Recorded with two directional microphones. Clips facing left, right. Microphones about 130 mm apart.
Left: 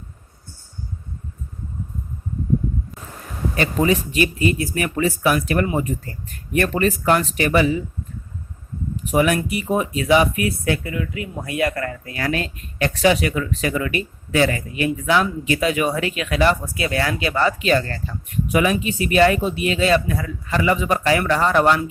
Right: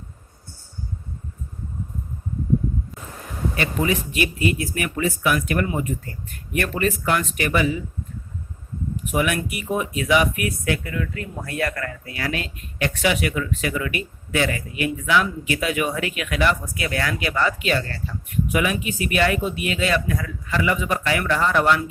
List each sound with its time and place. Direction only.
3.5 s speech: 35° left (ahead or behind)
9.0 s speech: 35° left (ahead or behind)
10.9 s speech: 15° left (ahead or behind)
12.0 s speech: 40° left (ahead or behind)